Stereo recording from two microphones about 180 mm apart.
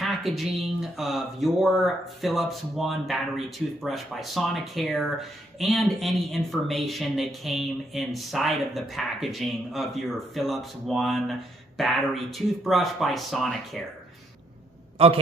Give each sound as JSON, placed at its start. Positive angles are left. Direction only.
{"t": 0.0, "sound": "speech", "side_deg": 0}
{"t": 14.9, "sound": "a man's voice", "side_deg": -30}